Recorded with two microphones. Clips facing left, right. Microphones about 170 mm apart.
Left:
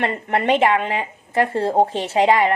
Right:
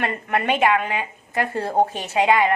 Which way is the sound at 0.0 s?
25° left (ahead or behind).